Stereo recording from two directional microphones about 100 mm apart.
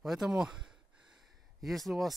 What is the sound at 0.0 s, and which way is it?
Speech, 5° right (ahead or behind).